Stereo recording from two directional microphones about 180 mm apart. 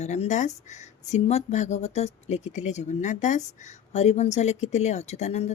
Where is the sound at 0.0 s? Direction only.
40° left (ahead or behind).